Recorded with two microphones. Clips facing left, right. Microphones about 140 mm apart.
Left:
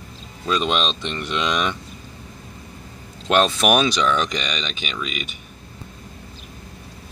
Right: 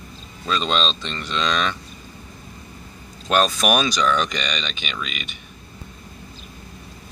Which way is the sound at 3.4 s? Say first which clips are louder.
Left 2 dB; 25° left (ahead or behind).